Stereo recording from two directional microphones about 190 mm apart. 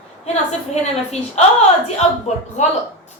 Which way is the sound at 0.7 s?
35° left (ahead or behind).